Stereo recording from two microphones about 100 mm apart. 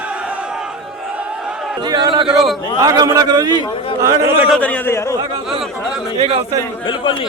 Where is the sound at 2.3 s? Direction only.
Centre (ahead or behind).